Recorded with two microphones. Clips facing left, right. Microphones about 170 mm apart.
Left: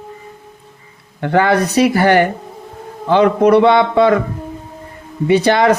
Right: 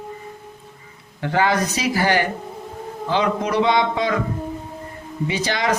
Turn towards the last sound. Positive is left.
turn(degrees=60)  # may be behind; listen again after turning